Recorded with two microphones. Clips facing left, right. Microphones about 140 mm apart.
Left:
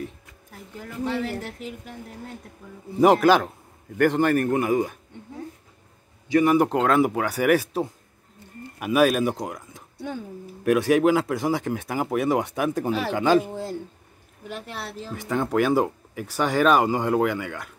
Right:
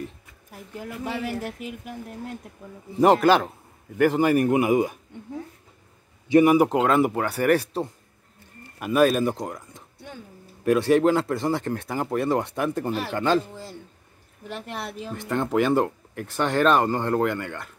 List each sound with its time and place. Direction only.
0.0 s speech: 5° right (ahead or behind)
3.0 s speech: centre (ahead or behind); by 4.9 s 15° right (ahead or behind)
6.3 s speech: 10° right (ahead or behind); by 13.5 s 10° left (ahead or behind)
13.5 s speech: 60° left (ahead or behind)
15.0 s speech: centre (ahead or behind)